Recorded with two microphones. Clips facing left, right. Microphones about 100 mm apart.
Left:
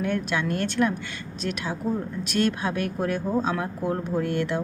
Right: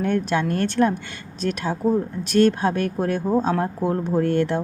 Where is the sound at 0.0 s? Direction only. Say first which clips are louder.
Right 4 dB; 40° right (ahead or behind).